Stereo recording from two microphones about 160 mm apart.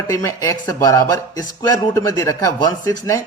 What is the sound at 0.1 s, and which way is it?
Speech, 20° left (ahead or behind).